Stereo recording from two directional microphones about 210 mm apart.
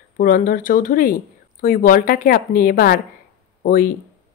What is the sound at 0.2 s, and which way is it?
Speech, 40° left (ahead or behind).